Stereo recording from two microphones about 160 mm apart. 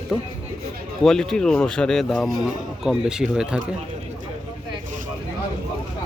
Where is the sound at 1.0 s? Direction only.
5° left (ahead or behind).